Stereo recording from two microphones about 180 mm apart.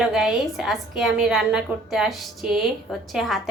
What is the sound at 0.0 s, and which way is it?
A woman's voice, centre (ahead or behind).